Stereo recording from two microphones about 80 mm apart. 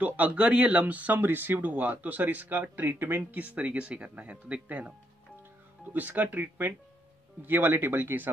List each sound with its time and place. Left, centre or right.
0.0 s speech: centre
5.9 s speech: right